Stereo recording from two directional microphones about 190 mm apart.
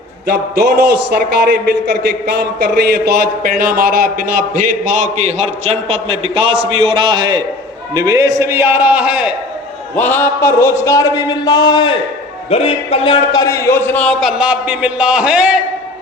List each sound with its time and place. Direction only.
0.3 s a man's voice: 60° right (ahead or behind); by 9.3 s 5° right (ahead or behind)
9.9 s a man's voice: 10° left (ahead or behind)